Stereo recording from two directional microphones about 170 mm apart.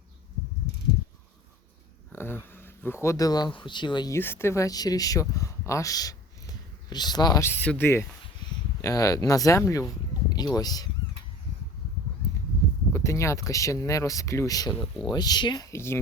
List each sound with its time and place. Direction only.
2.1 s speech: 15° left (ahead or behind)
4.2 s speech: 15° left (ahead or behind)
12.9 s speech: 15° left (ahead or behind)